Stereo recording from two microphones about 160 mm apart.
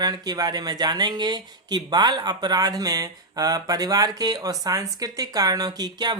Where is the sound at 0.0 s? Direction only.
25° right (ahead or behind).